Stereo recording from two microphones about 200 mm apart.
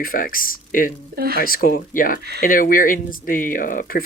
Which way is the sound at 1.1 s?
50° right (ahead or behind).